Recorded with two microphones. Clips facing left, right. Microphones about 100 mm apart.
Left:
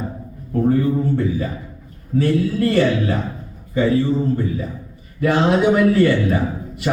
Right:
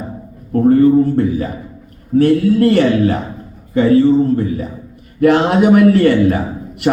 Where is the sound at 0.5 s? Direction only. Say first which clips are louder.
Right 7 dB; 55° right (ahead or behind).